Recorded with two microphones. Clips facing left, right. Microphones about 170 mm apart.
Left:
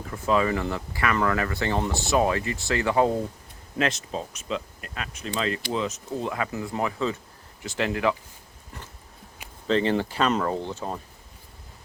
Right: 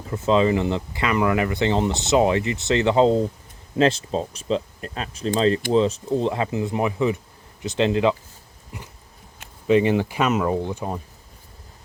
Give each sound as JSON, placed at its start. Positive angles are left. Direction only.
{"t": 0.1, "sound": "speech", "side_deg": -25}
{"t": 9.6, "sound": "speech", "side_deg": -10}